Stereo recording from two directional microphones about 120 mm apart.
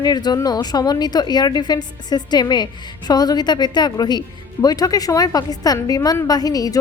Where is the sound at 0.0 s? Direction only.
35° left (ahead or behind).